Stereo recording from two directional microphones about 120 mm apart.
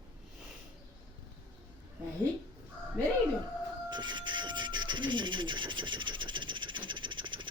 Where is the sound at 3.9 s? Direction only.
40° right (ahead or behind).